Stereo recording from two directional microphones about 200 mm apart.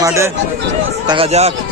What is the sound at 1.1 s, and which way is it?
Speech, 30° right (ahead or behind).